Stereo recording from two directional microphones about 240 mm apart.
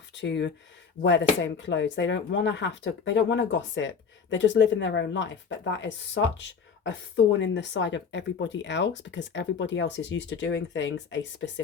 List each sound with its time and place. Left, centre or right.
0.1 s speech: left